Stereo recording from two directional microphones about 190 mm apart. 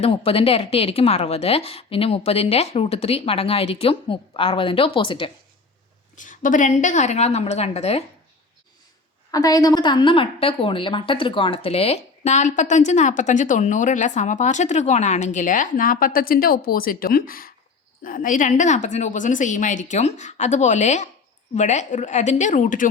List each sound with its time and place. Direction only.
0.0 s a woman's voice: 30° left (ahead or behind)
6.1 s a woman's voice: 45° left (ahead or behind)
9.3 s a woman's voice: 20° left (ahead or behind); by 22.9 s 40° left (ahead or behind)